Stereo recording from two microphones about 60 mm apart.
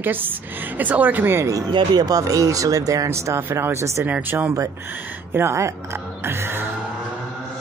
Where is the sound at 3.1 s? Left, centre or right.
Right.